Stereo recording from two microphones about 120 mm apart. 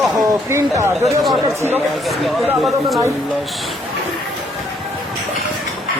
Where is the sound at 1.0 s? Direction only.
Centre (ahead or behind).